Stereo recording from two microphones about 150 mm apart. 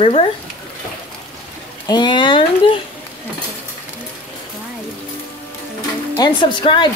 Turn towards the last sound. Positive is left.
turn(degrees=30)  # may be behind; listen again after turning